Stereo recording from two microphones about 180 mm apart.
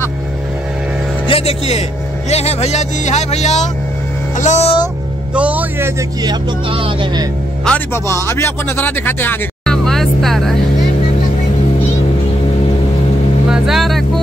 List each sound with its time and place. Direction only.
1.2 s a man's voice: 35° left (ahead or behind)
5.3 s a man's voice: 5° right (ahead or behind)
6.7 s speech: 30° right (ahead or behind)
7.6 s speech: 10° left (ahead or behind)
13.5 s vehicle: centre (ahead or behind)